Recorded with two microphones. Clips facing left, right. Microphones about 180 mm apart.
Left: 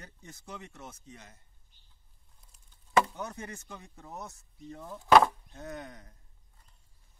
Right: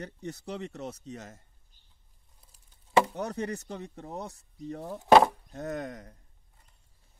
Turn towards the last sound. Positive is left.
turn(degrees=-45)  # may be behind; listen again after turning